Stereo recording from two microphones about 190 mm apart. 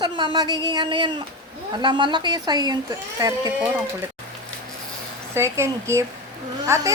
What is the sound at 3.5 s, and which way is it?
Speech, 10° right (ahead or behind).